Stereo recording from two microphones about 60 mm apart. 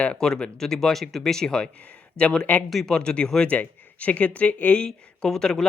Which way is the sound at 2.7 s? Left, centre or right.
Centre.